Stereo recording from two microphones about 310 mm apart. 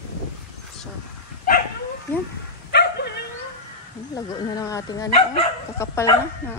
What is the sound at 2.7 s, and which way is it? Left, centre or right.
Dog, left.